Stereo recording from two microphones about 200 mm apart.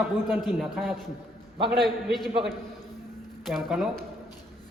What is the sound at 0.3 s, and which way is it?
Speech, centre (ahead or behind).